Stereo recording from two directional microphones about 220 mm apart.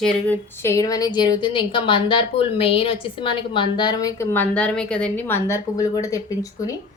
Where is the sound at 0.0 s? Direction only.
10° left (ahead or behind).